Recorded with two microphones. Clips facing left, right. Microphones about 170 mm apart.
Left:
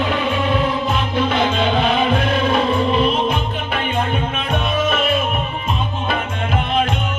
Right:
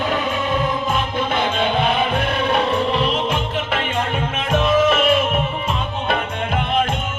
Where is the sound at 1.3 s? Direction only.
55° right (ahead or behind); by 5.1 s 90° right.